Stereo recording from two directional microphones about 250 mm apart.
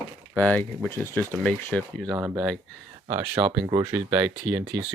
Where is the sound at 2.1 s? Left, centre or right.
Centre.